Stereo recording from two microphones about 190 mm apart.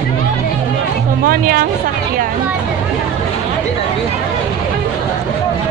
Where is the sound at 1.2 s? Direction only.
50° right (ahead or behind).